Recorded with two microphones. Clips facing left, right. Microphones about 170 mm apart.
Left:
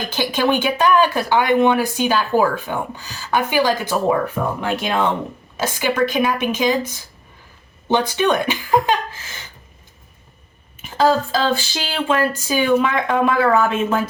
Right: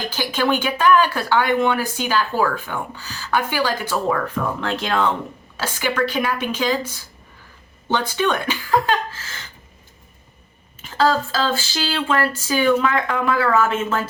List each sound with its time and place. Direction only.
0.1 s speech: 15° left (ahead or behind)
10.8 s speech: 15° left (ahead or behind)